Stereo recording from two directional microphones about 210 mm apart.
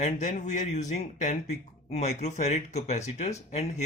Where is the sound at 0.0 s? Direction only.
35° left (ahead or behind).